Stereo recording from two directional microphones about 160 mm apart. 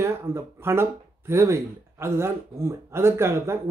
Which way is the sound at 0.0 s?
15° right (ahead or behind).